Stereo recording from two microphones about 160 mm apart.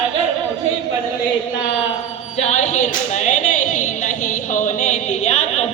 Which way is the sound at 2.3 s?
45° left (ahead or behind).